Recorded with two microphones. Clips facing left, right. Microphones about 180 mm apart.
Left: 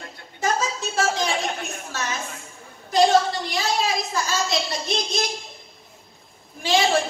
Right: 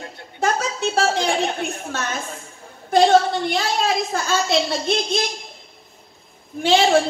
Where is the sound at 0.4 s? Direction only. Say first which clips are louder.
Right 3 dB; 60° right (ahead or behind).